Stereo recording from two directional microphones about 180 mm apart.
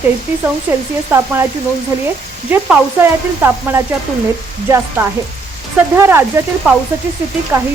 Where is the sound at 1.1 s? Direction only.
15° right (ahead or behind).